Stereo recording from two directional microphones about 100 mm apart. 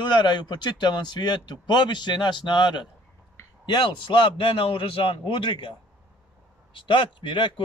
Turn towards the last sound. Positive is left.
turn(degrees=55)  # may be behind; listen again after turning